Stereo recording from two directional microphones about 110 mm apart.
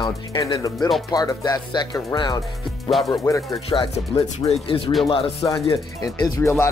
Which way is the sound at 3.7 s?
60° left (ahead or behind).